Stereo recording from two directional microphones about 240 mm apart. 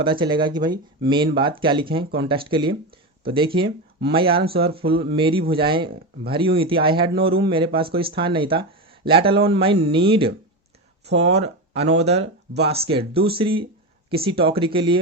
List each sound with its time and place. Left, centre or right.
0.0 s speech: right